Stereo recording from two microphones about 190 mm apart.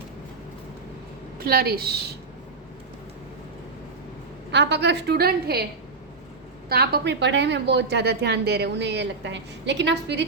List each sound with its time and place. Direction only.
1.4 s a woman's voice: 50° right (ahead or behind)
4.5 s a woman's voice: 65° right (ahead or behind)
6.7 s a woman's voice: 55° right (ahead or behind)